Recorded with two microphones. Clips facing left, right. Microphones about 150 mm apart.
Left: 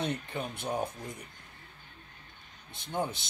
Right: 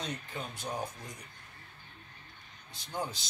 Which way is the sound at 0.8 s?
55° left (ahead or behind).